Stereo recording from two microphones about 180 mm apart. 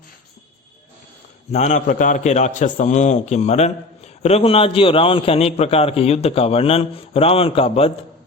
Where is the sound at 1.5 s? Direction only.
40° left (ahead or behind).